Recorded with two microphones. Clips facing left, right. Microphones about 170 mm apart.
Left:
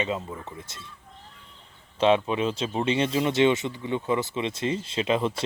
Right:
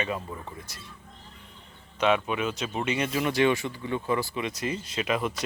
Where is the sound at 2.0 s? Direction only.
30° left (ahead or behind).